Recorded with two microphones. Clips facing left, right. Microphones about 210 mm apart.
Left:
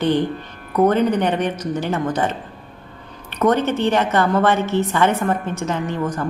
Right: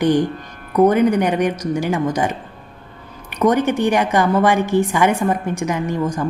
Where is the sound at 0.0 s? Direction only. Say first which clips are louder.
Right 2 dB; 15° right (ahead or behind).